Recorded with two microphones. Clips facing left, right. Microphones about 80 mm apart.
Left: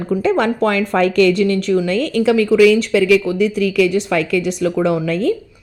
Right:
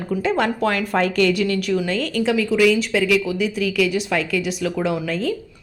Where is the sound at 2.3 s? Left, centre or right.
Left.